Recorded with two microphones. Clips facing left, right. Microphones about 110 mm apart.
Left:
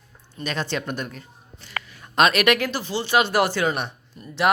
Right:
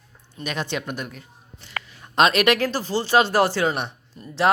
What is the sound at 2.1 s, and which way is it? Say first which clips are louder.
Speech: right 1 dB; 25° right (ahead or behind).